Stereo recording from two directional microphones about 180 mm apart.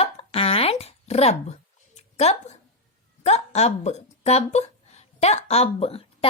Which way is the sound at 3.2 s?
35° left (ahead or behind).